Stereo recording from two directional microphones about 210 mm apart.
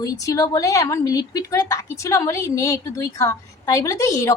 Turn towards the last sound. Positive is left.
turn(degrees=15)  # may be behind; listen again after turning